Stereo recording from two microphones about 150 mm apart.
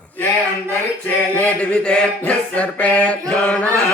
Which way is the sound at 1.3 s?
10° left (ahead or behind).